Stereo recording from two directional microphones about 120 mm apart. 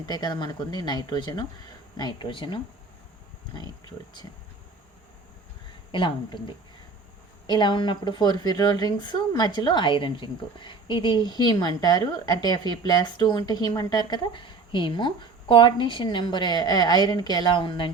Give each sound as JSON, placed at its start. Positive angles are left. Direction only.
{"t": 0.0, "sound": "a woman's voice", "side_deg": 35}
{"t": 5.9, "sound": "a woman's voice", "side_deg": 40}